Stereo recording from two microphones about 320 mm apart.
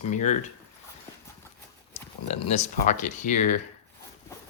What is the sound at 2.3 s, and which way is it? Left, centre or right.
Speech, left.